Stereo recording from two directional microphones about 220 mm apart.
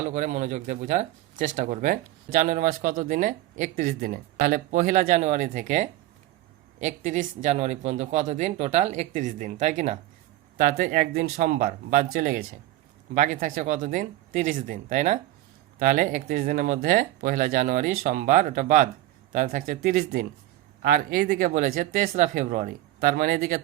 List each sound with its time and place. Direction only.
0.0 s speech: 35° right (ahead or behind)